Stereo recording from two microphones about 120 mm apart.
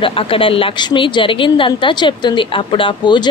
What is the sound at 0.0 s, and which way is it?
A woman's voice, 50° left (ahead or behind).